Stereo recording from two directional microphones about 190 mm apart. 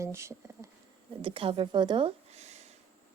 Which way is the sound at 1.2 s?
25° right (ahead or behind).